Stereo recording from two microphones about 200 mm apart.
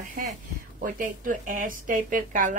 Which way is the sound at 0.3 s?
45° right (ahead or behind).